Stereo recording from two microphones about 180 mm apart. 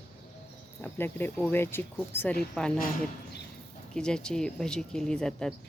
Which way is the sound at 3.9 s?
5° left (ahead or behind).